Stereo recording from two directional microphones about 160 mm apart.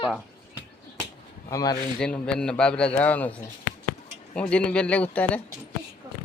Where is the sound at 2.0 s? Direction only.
5° left (ahead or behind).